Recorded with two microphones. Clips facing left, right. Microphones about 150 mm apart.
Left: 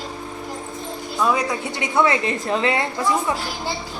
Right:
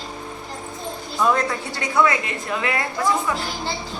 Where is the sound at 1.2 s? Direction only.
10° left (ahead or behind); by 2.8 s 30° left (ahead or behind).